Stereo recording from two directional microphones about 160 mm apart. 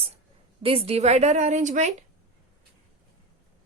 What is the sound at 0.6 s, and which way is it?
A woman's voice, 35° right (ahead or behind).